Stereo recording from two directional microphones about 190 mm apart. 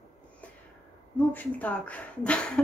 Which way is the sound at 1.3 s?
10° left (ahead or behind).